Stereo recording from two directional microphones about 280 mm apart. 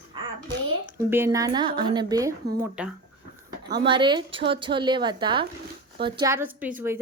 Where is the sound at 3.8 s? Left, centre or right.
Centre.